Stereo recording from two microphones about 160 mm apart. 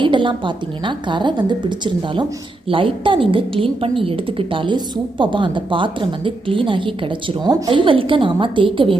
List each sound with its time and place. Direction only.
0.0 s a woman's voice: 30° right (ahead or behind)